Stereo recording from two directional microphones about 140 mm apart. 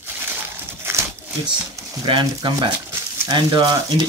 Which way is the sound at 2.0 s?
30° right (ahead or behind).